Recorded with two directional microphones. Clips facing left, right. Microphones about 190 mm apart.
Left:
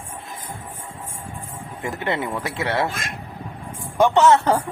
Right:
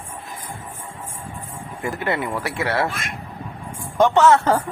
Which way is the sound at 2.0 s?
20° left (ahead or behind).